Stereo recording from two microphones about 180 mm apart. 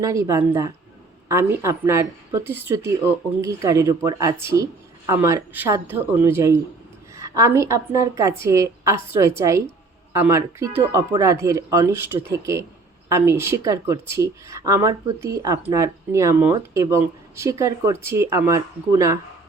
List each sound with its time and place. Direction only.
0.0 s a woman's voice: 15° right (ahead or behind)